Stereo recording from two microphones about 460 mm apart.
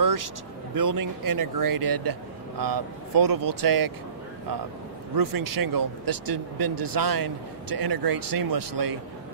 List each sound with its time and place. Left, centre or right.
0.0 s vehicle: right
0.7 s speech: right
5.1 s speech: right